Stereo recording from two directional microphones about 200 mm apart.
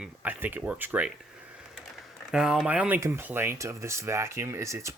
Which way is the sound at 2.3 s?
5° right (ahead or behind).